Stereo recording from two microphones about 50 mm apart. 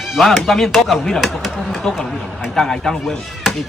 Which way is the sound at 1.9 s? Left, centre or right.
Centre.